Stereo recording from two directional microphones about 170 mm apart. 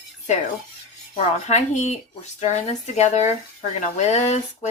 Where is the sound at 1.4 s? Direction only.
40° left (ahead or behind).